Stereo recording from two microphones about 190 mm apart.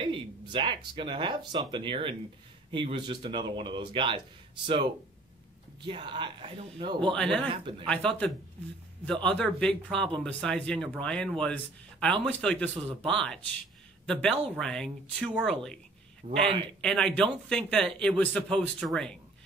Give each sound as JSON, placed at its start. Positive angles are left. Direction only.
{"t": 0.0, "sound": "speech", "side_deg": -25}
{"t": 5.9, "sound": "speech", "side_deg": -25}
{"t": 7.2, "sound": "speech", "side_deg": 5}
{"t": 7.4, "sound": "speech", "side_deg": -25}
{"t": 7.8, "sound": "speech", "side_deg": 5}
{"t": 16.2, "sound": "a man's voice", "side_deg": -40}
{"t": 16.8, "sound": "speech", "side_deg": 5}